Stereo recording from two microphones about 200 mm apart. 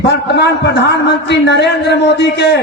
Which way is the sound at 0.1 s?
60° left (ahead or behind).